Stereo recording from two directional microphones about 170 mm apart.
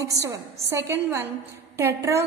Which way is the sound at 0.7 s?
15° right (ahead or behind).